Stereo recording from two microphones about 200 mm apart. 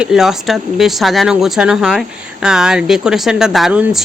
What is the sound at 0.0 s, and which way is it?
Speech, centre (ahead or behind).